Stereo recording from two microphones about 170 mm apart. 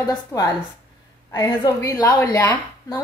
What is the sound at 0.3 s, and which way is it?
A woman's voice, 15° left (ahead or behind).